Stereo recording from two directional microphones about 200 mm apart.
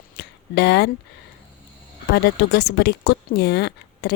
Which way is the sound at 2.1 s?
55° left (ahead or behind).